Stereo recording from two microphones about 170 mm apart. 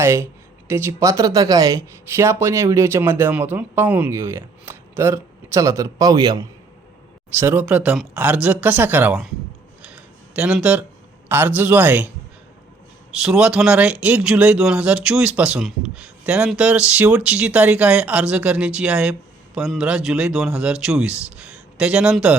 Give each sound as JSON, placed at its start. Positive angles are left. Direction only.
{"t": 0.0, "sound": "speech", "side_deg": -15}
{"t": 7.3, "sound": "speech", "side_deg": -10}
{"t": 10.3, "sound": "speech", "side_deg": -5}
{"t": 13.2, "sound": "speech", "side_deg": -5}